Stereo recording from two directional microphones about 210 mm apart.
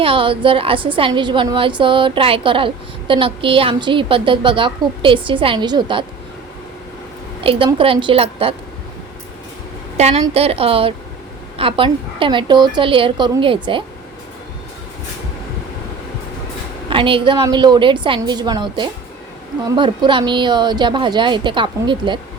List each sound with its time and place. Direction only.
0.0 s a woman's voice: 25° right (ahead or behind)
7.4 s a woman's voice: 25° right (ahead or behind)
10.0 s a woman's voice: 30° right (ahead or behind)
16.9 s a woman's voice: 25° right (ahead or behind)